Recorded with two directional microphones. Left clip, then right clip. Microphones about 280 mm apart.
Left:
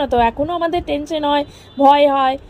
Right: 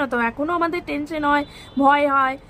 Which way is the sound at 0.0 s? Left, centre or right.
Centre.